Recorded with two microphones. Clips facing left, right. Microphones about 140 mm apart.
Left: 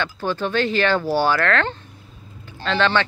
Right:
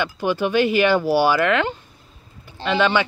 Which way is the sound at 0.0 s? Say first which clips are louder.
Right 3 dB; 15° right (ahead or behind).